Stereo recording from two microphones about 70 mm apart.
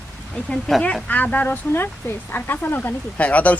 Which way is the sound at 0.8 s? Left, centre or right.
Centre.